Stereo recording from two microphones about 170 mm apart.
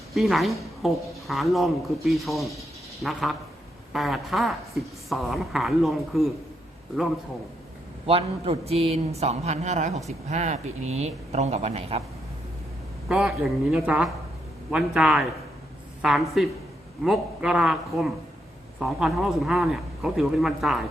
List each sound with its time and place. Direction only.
0.1 s a woman's voice: centre (ahead or behind)
8.0 s a man's voice: 35° right (ahead or behind)
13.1 s a woman's voice: centre (ahead or behind)